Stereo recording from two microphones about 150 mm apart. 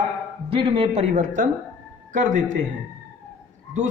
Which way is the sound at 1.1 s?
55° right (ahead or behind).